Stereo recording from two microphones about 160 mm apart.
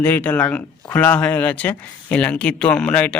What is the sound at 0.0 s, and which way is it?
Speech, 10° left (ahead or behind).